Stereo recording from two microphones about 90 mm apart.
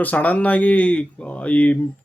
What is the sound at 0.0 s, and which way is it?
Speech, 15° left (ahead or behind).